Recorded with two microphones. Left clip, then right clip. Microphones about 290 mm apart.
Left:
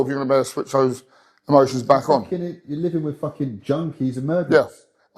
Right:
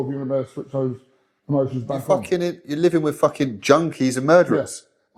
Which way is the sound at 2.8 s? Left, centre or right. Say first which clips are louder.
Right 8 dB; centre.